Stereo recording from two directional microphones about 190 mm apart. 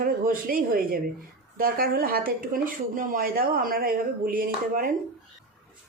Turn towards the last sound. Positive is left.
turn(degrees=-50)  # may be behind; listen again after turning